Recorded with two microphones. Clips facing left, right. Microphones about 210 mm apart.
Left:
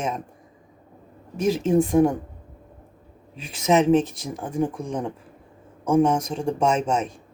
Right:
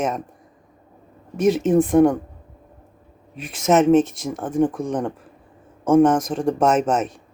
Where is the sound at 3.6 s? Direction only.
50° right (ahead or behind).